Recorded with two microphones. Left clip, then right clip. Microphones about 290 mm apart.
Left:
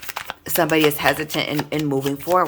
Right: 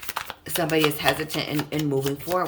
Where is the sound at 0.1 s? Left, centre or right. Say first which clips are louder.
Left 2 dB; centre.